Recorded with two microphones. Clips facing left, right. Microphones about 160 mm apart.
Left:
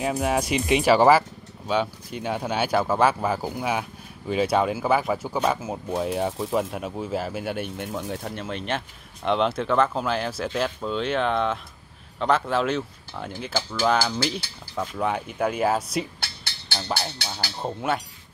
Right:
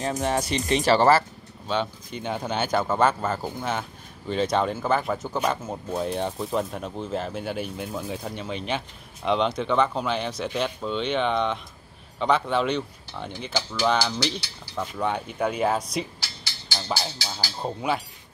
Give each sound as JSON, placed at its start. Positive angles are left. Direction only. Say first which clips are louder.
{"t": 0.0, "sound": "speech", "louder": "left 2 dB", "side_deg": 10}
{"t": 16.2, "sound": "a sound", "louder": "left 2 dB", "side_deg": 60}
{"t": 17.6, "sound": "speech", "louder": "even", "side_deg": 0}